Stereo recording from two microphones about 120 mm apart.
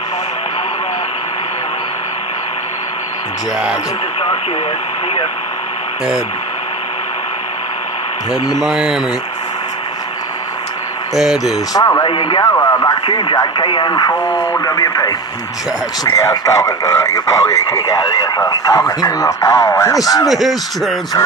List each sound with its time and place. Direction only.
8.5 s speech: 5° right (ahead or behind)
11.1 s speech: 5° right (ahead or behind)
11.7 s speech: 30° left (ahead or behind)
12.1 s speech: 45° left (ahead or behind)
12.4 s speech: 30° left (ahead or behind)
13.0 s speech: 40° left (ahead or behind); by 20.0 s 25° left (ahead or behind)
20.2 s speech: centre (ahead or behind)